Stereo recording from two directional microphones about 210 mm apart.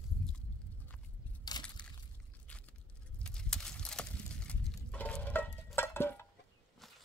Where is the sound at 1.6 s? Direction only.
20° left (ahead or behind).